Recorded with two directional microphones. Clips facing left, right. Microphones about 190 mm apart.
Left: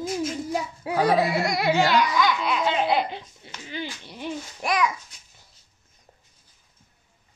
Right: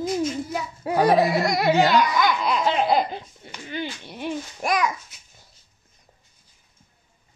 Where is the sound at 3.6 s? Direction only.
55° right (ahead or behind).